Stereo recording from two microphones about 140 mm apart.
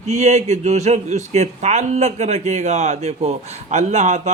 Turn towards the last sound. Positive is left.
turn(degrees=-55)  # may be behind; listen again after turning